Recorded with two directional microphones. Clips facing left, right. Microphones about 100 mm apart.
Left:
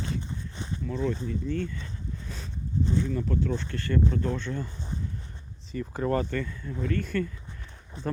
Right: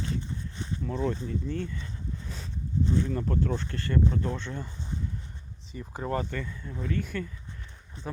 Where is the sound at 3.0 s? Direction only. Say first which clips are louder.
Even; 40° right (ahead or behind); by 4.7 s 25° right (ahead or behind).